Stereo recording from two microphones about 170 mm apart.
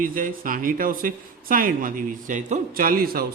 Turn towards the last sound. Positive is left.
turn(degrees=-60)  # may be behind; listen again after turning